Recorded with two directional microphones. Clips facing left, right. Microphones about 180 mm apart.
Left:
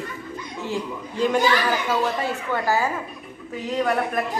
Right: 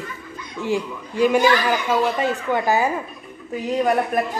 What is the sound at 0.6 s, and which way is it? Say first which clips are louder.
A man's voice: right 5 dB; 10° right (ahead or behind).